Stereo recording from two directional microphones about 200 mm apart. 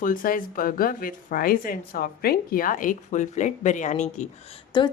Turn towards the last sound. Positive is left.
turn(degrees=25)  # may be behind; listen again after turning